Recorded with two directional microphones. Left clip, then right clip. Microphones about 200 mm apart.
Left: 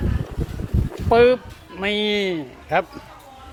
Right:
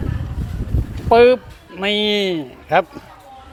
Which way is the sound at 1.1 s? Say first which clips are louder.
Right 4 dB; 10° right (ahead or behind).